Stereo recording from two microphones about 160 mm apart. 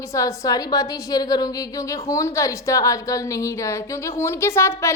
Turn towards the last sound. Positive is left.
turn(degrees=15)  # may be behind; listen again after turning